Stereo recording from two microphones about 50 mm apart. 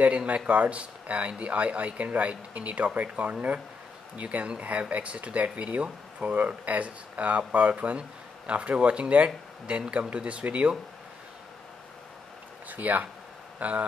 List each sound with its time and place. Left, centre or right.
0.0 s speech: right
12.6 s a man's voice: right